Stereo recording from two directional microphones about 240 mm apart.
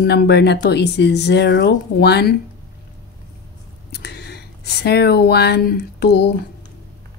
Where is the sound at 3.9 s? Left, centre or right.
Left.